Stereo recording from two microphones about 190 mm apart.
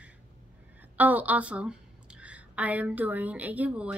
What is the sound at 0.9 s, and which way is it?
A woman's voice, 10° right (ahead or behind).